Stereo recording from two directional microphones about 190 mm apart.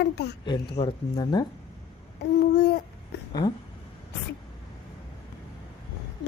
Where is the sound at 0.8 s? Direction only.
35° left (ahead or behind).